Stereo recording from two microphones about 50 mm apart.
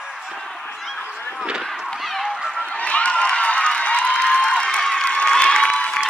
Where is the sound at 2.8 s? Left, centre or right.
Left.